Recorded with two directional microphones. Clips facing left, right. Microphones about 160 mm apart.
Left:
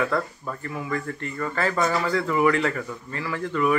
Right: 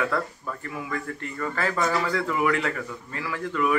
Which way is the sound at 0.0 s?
Centre (ahead or behind).